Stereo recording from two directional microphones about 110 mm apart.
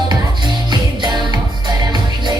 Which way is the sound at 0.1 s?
40° right (ahead or behind).